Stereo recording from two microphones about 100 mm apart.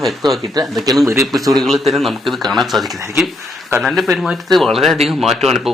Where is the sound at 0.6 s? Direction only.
40° right (ahead or behind).